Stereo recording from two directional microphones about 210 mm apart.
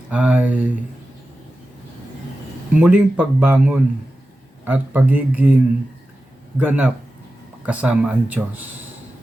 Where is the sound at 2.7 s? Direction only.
5° right (ahead or behind).